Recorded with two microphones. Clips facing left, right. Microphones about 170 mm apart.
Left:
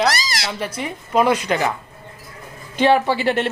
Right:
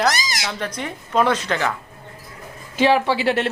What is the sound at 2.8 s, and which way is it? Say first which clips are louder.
Speech: left 1 dB; centre (ahead or behind).